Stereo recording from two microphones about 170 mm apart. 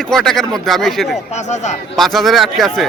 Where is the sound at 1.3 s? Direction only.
40° left (ahead or behind).